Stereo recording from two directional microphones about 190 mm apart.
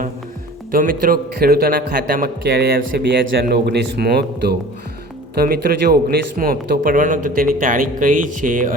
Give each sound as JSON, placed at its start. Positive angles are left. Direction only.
{"t": 0.7, "sound": "a man's voice", "side_deg": -45}